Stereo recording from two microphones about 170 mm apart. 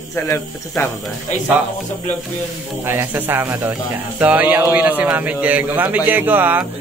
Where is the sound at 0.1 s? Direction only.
15° left (ahead or behind).